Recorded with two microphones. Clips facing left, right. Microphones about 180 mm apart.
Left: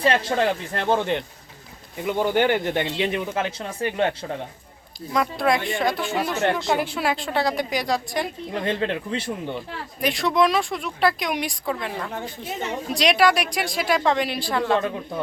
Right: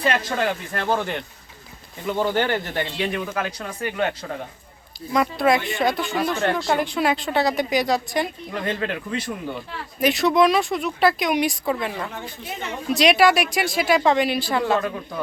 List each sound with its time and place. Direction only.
0.0 s speech: 30° left (ahead or behind)
5.1 s speech: centre (ahead or behind)
6.4 s speech: 20° left (ahead or behind)
6.7 s speech: 5° left (ahead or behind)
8.5 s speech: 30° left (ahead or behind)
9.6 s speech: centre (ahead or behind)